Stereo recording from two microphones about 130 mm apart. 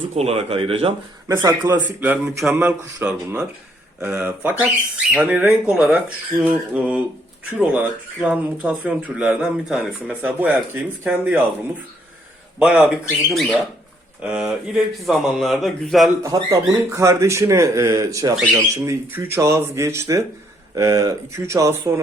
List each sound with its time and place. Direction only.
0.1 s speech: 50° right (ahead or behind)
1.3 s speech: 25° right (ahead or behind)
1.7 s speech: 15° right (ahead or behind)
12.5 s speech: 5° right (ahead or behind)
16.2 s speech: 25° right (ahead or behind)